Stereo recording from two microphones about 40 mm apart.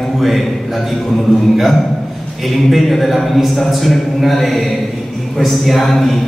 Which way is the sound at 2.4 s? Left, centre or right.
Centre.